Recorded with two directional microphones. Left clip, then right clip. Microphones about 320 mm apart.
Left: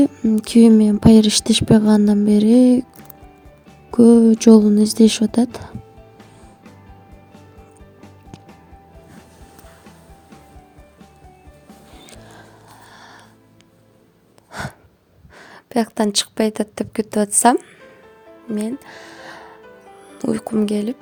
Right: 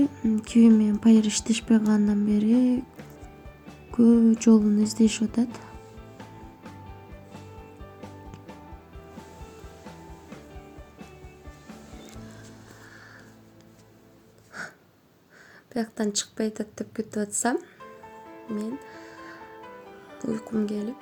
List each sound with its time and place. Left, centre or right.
0.0 s speech: left
3.9 s speech: left
14.5 s gasp: left
15.4 s speech: left